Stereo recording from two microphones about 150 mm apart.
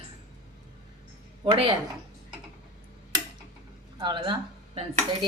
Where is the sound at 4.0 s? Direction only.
30° right (ahead or behind).